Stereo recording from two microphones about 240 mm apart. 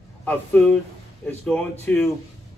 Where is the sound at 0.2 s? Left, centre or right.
Centre.